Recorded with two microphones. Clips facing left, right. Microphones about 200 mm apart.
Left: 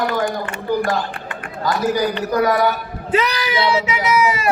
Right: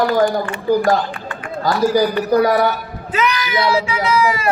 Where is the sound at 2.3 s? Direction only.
35° right (ahead or behind).